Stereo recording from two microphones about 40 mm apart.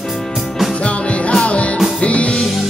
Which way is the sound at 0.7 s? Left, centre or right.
Left.